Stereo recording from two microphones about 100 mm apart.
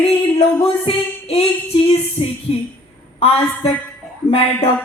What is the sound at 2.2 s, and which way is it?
Speech, 75° left (ahead or behind).